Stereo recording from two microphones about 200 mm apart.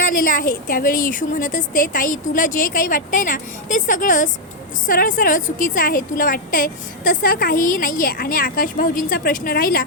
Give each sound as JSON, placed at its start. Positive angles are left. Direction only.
{"t": 0.0, "sound": "a woman's voice", "side_deg": 45}